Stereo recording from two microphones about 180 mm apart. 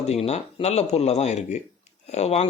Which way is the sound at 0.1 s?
35° left (ahead or behind).